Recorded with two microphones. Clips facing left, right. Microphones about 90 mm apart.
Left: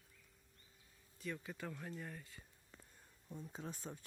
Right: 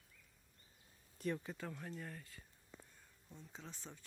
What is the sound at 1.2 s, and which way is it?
Speech, 50° right (ahead or behind).